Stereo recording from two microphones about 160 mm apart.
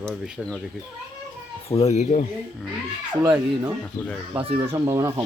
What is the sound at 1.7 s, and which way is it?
Speech, 40° left (ahead or behind).